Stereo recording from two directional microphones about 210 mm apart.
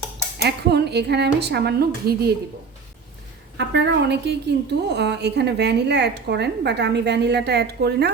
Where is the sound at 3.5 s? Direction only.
55° right (ahead or behind).